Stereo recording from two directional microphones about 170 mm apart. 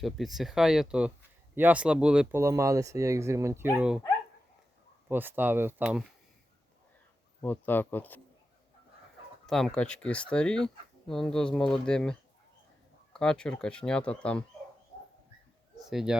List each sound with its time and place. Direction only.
0.0 s speech: centre (ahead or behind)
2.4 s speech: 20° right (ahead or behind)
3.8 s speech: 5° right (ahead or behind)
5.0 s speech: 10° right (ahead or behind)
7.4 s speech: 10° left (ahead or behind)
9.5 s speech: centre (ahead or behind)
13.1 s speech: 5° left (ahead or behind)
15.9 s speech: centre (ahead or behind)